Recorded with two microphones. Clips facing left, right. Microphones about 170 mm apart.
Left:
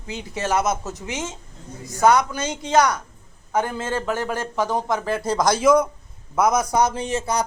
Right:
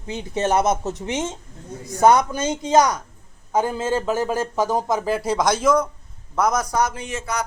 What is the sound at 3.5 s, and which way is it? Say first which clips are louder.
A man's voice: right 3 dB; 15° right (ahead or behind).